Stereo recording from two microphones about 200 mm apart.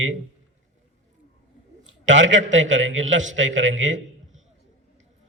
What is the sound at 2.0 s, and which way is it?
A man's voice, 70° right (ahead or behind).